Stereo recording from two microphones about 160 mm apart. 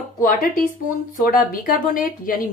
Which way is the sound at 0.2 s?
60° left (ahead or behind).